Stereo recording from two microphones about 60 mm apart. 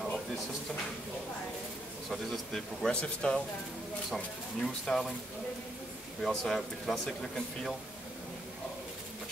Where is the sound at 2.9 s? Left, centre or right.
Centre.